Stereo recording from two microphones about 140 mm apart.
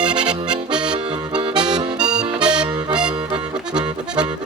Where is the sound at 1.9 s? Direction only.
5° right (ahead or behind).